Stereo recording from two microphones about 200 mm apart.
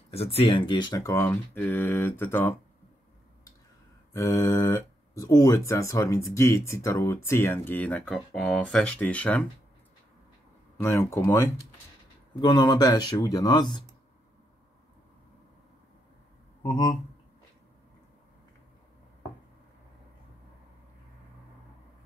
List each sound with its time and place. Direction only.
0.1 s speech: 30° left (ahead or behind); by 2.5 s 10° left (ahead or behind)
4.1 s speech: 15° left (ahead or behind)
10.8 s speech: 10° left (ahead or behind)
16.6 s speech: 20° left (ahead or behind)